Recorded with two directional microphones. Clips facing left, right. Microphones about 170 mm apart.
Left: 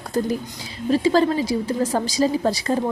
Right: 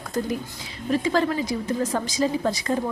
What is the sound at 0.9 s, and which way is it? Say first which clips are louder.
A woman's voice: left 4 dB; 30° left (ahead or behind).